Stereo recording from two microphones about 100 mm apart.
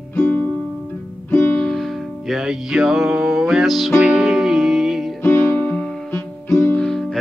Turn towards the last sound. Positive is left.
turn(degrees=5)  # may be behind; listen again after turning